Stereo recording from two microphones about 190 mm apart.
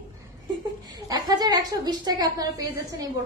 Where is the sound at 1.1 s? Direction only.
20° right (ahead or behind).